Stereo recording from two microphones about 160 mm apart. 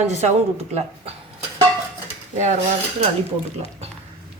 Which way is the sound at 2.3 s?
45° right (ahead or behind).